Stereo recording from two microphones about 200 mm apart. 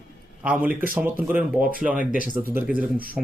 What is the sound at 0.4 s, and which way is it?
Speech, 5° right (ahead or behind).